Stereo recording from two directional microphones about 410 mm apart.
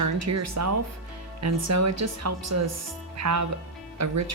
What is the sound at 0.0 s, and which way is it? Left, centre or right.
Speech, right.